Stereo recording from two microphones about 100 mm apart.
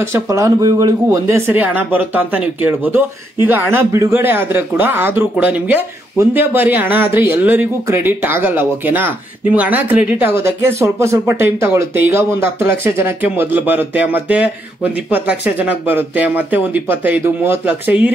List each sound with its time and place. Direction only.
0.0 s speech: 30° right (ahead or behind); by 18.1 s 15° right (ahead or behind)